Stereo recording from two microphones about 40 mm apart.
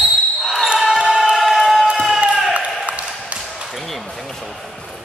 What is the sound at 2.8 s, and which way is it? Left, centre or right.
Ping, right.